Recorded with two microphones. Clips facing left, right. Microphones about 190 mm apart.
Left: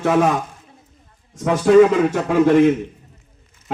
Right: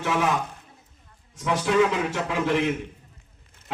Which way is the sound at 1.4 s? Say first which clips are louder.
Left 10 dB; 45° left (ahead or behind).